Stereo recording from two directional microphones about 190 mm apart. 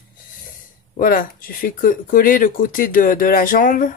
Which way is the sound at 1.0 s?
45° left (ahead or behind).